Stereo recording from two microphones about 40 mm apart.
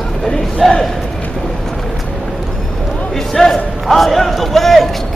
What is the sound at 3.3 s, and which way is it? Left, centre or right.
Speech, centre.